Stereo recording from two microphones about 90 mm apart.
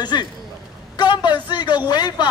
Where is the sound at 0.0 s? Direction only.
55° left (ahead or behind).